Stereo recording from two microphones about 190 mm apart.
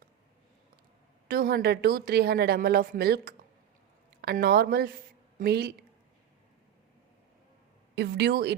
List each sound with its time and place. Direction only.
1.3 s speech: 50° right (ahead or behind)
7.9 s speech: 60° right (ahead or behind)